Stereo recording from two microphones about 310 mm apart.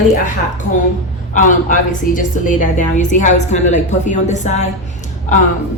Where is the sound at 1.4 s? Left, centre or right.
Left.